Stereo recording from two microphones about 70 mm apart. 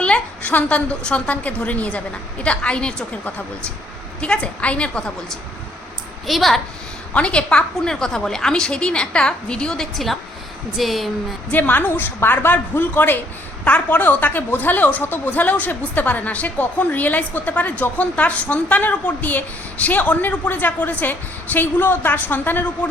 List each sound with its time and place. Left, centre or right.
0.0 s a woman's voice: centre
6.2 s a woman's voice: centre
7.1 s a woman's voice: centre
11.5 s a woman's voice: left